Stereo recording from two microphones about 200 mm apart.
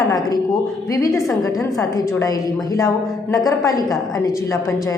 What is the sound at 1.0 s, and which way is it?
Speech, centre (ahead or behind).